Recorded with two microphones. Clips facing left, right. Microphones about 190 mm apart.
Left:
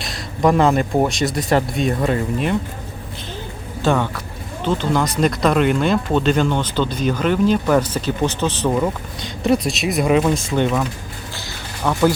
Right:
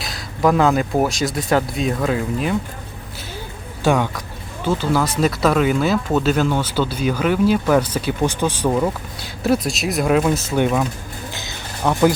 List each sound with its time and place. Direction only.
0.0 s speech: centre (ahead or behind)
3.8 s speech: 15° right (ahead or behind)
11.3 s music: 15° right (ahead or behind)